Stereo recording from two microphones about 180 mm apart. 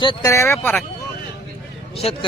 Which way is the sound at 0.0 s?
25° left (ahead or behind).